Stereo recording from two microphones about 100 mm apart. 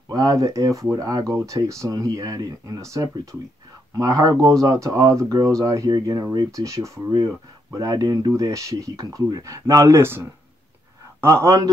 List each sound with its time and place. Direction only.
0.1 s a man's voice: 35° right (ahead or behind)